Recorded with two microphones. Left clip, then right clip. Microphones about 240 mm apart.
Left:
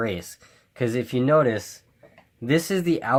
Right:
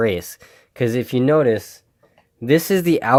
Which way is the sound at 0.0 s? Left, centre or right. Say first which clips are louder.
Right 8 dB; right.